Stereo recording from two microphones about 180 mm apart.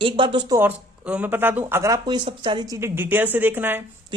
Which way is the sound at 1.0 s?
10° right (ahead or behind).